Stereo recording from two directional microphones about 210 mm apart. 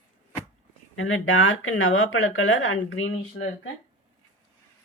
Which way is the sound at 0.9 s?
70° left (ahead or behind).